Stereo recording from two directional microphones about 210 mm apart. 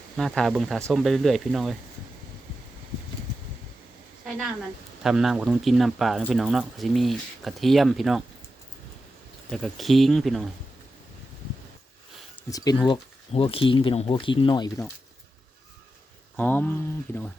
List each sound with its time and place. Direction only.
0.2 s speech: centre (ahead or behind)
5.0 s speech: centre (ahead or behind)
9.5 s speech: centre (ahead or behind)
12.5 s speech: 15° left (ahead or behind)
16.4 s a sound: 10° left (ahead or behind)